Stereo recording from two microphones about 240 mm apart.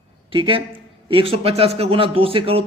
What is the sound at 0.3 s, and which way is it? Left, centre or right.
Speech, right.